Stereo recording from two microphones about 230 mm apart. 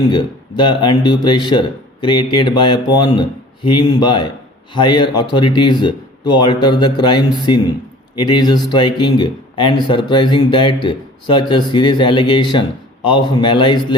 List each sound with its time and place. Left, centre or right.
0.1 s speech: centre